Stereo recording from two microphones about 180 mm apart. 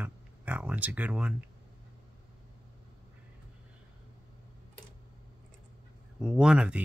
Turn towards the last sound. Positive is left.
turn(degrees=-5)  # may be behind; listen again after turning